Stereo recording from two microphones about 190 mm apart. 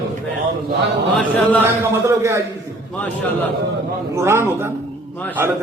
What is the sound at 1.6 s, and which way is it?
Speech, 15° right (ahead or behind).